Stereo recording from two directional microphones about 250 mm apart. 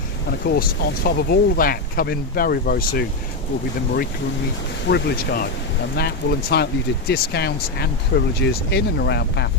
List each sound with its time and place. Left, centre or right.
0.4 s speech: left
4.9 s speech: left